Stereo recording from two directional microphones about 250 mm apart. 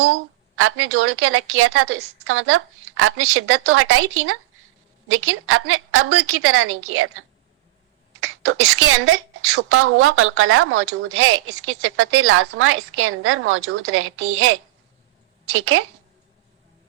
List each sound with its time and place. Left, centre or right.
0.0 s a woman's voice: right